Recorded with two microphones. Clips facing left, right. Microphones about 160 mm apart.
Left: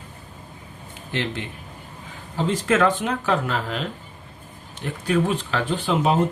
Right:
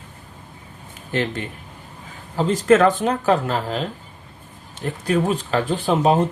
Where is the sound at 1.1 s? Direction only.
45° right (ahead or behind).